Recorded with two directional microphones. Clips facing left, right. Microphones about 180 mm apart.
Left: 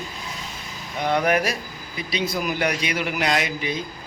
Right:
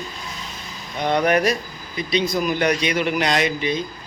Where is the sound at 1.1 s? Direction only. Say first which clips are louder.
Right 3 dB; 5° left (ahead or behind).